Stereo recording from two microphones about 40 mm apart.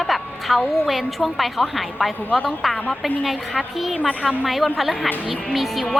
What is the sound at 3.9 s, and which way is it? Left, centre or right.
Speech, left.